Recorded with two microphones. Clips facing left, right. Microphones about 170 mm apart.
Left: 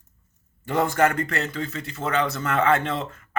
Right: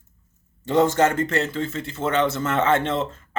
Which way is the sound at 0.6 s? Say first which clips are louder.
Right 3 dB; 25° right (ahead or behind).